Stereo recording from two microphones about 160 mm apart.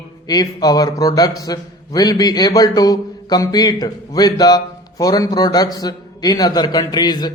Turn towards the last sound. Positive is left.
turn(degrees=25)  # may be behind; listen again after turning